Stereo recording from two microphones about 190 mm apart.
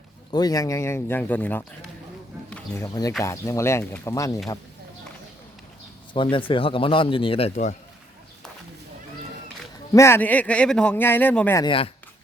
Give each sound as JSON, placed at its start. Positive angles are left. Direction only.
{"t": 0.3, "sound": "speech", "side_deg": 20}
{"t": 6.3, "sound": "a man's voice", "side_deg": 25}
{"t": 9.9, "sound": "speech", "side_deg": 15}
{"t": 11.6, "sound": "a man's voice", "side_deg": 30}